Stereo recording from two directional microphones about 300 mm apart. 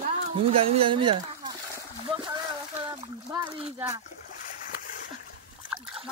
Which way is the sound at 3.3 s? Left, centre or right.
Centre.